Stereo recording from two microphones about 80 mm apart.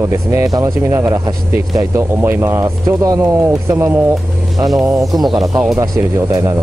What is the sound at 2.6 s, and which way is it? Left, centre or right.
Speech, right.